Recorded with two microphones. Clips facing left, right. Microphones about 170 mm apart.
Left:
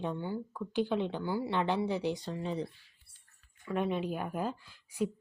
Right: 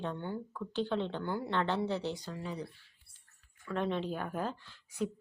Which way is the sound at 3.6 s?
10° left (ahead or behind).